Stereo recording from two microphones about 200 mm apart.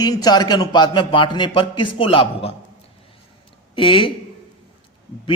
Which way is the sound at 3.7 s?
25° left (ahead or behind).